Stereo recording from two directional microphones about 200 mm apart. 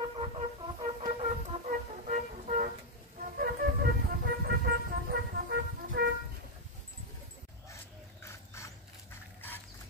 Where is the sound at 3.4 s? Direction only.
55° right (ahead or behind).